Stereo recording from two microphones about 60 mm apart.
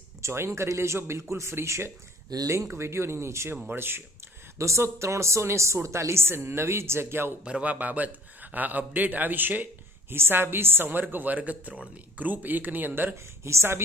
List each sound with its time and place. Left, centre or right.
0.2 s speech: right
2.3 s speech: right
2.7 s speech: right
4.6 s speech: right
7.4 s a man's voice: centre; by 13.5 s right
13.5 s speech: right